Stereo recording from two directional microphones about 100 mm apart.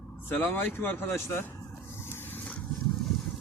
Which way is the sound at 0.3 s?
20° left (ahead or behind).